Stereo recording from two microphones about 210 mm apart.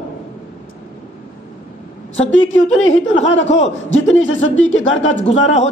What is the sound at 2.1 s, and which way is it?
Speech, 65° left (ahead or behind).